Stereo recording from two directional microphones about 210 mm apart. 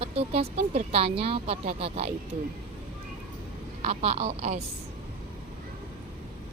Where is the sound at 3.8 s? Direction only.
30° right (ahead or behind).